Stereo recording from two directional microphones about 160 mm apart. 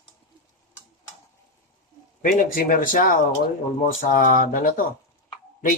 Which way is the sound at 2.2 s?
55° left (ahead or behind).